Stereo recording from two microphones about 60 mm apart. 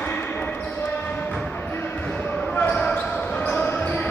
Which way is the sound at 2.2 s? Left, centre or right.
Left.